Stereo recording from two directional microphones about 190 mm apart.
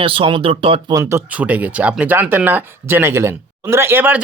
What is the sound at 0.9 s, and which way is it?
Speech, 15° right (ahead or behind).